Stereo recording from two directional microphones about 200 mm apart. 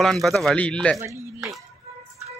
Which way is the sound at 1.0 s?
15° right (ahead or behind).